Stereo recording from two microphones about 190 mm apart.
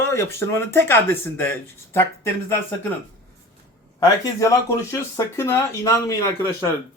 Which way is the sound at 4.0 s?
15° left (ahead or behind).